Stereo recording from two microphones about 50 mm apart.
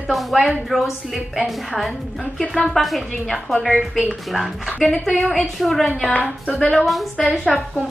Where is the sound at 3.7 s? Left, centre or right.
Centre.